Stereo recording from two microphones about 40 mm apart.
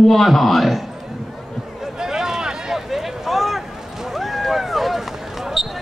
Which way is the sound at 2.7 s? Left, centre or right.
Centre.